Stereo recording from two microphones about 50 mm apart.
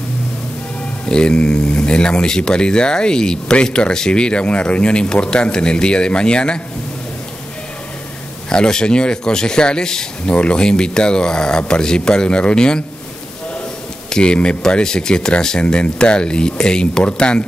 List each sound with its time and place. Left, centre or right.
1.0 s speech: centre
8.5 s speech: centre
14.1 s speech: centre